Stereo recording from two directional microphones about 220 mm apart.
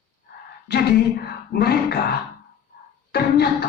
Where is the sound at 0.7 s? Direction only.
45° left (ahead or behind).